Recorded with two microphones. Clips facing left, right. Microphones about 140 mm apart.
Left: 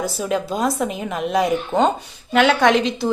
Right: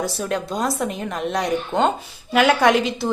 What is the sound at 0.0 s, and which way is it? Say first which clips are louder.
A woman's voice: left 2 dB; centre (ahead or behind).